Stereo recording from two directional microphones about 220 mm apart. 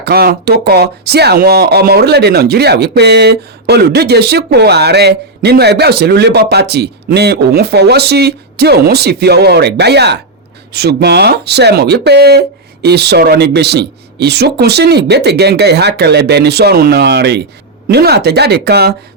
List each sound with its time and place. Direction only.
0.0 s speech: 45° right (ahead or behind)